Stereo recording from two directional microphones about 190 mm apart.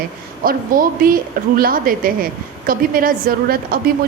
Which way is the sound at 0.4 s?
50° right (ahead or behind).